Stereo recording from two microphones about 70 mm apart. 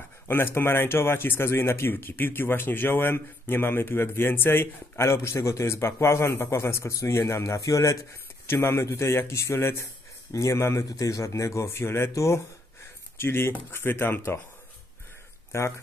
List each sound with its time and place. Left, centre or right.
0.3 s a man's voice: left
8.5 s a man's voice: left
15.5 s a man's voice: left